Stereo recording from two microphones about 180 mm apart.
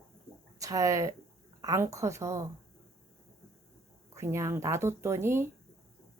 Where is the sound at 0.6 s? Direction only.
20° right (ahead or behind).